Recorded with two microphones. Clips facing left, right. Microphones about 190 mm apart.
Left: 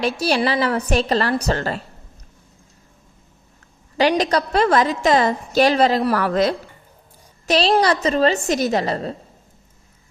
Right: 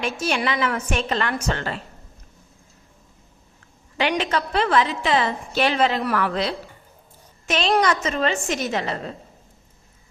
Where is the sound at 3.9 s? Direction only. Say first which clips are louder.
Left 5 dB; 40° left (ahead or behind).